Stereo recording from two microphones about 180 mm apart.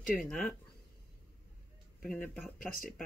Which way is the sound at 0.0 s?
5° left (ahead or behind).